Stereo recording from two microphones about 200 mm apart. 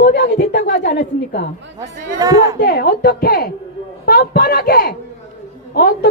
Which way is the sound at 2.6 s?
50° left (ahead or behind).